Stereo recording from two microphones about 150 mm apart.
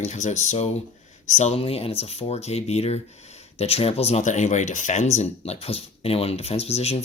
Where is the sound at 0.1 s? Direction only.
50° left (ahead or behind).